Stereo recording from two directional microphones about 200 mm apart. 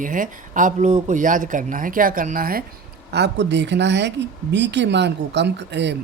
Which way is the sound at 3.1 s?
60° right (ahead or behind).